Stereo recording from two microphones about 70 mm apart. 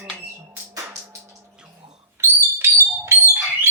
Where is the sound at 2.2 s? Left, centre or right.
Right.